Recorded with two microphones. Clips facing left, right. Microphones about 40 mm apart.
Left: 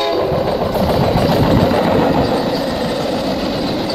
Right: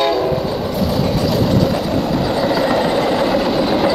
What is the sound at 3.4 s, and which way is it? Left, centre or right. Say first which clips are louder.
Vehicle: right 3 dB; centre.